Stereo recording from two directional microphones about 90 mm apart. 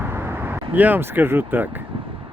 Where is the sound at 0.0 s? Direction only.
25° right (ahead or behind).